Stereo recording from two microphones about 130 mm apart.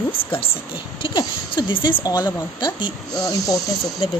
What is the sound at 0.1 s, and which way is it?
Speech, 45° left (ahead or behind).